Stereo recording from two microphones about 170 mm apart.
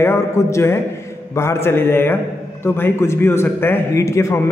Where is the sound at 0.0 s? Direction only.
15° left (ahead or behind).